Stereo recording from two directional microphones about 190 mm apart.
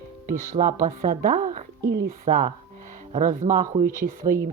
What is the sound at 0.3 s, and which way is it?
Speech, 45° right (ahead or behind).